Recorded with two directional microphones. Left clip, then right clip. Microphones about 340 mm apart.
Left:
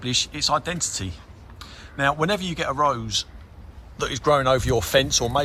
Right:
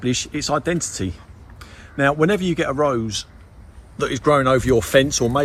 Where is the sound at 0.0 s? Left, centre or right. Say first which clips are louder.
Even; centre.